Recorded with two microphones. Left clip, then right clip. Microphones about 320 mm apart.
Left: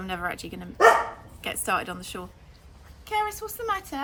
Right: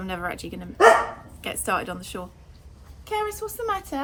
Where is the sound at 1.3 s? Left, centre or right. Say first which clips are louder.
Right 1 dB; centre.